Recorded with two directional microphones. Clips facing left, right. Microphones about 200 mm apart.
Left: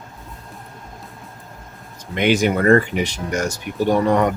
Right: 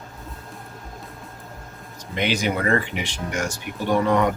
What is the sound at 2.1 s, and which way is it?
Speech, 50° left (ahead or behind).